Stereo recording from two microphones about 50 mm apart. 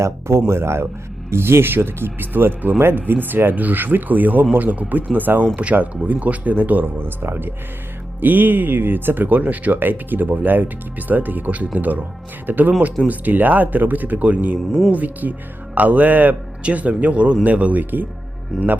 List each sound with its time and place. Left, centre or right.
0.0 s speech: right
8.2 s speech: right
18.5 s speech: centre